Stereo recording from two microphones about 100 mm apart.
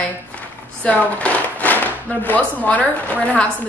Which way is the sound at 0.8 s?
15° left (ahead or behind).